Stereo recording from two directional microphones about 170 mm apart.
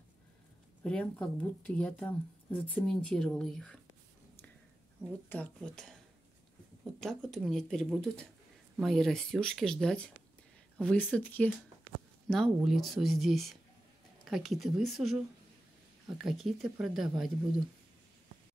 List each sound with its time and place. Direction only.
0.8 s speech: 5° left (ahead or behind)
5.3 s speech: 5° left (ahead or behind)
7.0 s speech: 5° left (ahead or behind)